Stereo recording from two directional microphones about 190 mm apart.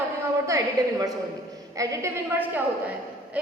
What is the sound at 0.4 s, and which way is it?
A woman's voice, 15° right (ahead or behind).